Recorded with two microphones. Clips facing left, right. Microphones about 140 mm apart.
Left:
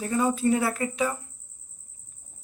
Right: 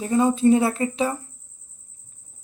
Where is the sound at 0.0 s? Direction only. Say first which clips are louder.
Right 6 dB; 25° right (ahead or behind).